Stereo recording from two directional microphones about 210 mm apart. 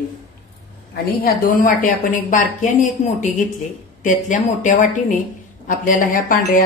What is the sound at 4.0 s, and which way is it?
A woman's voice, 35° left (ahead or behind).